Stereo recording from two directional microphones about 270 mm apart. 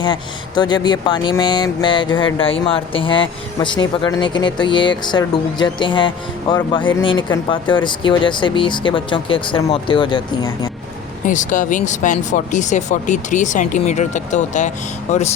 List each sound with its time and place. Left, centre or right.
0.0 s speech: centre
11.3 s speech: left